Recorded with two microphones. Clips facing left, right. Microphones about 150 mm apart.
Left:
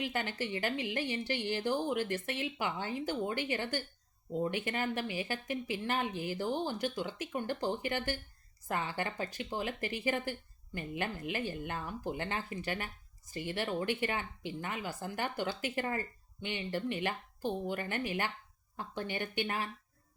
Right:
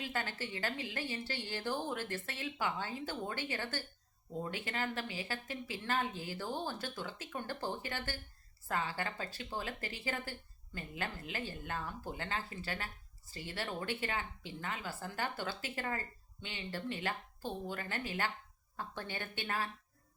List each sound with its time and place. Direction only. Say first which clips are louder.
0.0 s a woman's voice: left 4 dB; 20° left (ahead or behind)